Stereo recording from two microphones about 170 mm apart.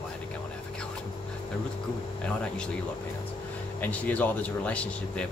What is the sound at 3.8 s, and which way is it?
Speech, 10° left (ahead or behind).